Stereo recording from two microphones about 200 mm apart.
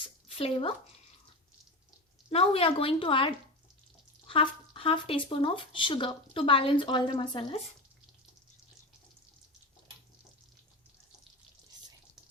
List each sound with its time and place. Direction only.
0.3 s speech: 25° left (ahead or behind)
2.3 s speech: 30° left (ahead or behind)